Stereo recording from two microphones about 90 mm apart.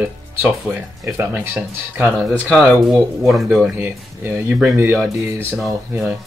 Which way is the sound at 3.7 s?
25° right (ahead or behind).